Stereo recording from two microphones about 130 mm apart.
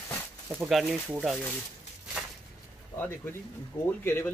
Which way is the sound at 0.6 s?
Centre (ahead or behind).